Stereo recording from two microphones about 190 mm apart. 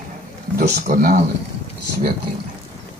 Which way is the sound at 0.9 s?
50° right (ahead or behind).